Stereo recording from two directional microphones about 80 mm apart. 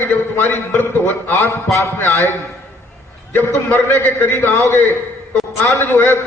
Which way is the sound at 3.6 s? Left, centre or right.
Left.